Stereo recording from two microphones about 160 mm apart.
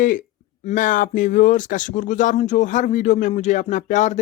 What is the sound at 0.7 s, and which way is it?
Speech, 55° left (ahead or behind).